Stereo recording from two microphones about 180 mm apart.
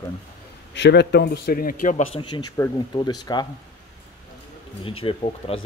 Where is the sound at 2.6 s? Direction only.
15° left (ahead or behind).